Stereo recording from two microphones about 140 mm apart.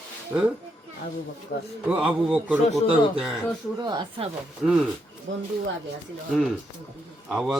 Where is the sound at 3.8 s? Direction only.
30° right (ahead or behind).